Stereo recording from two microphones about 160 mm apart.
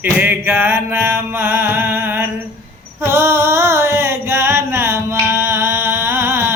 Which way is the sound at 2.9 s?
15° right (ahead or behind).